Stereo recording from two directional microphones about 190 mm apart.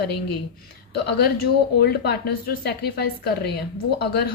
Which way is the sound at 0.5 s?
55° left (ahead or behind).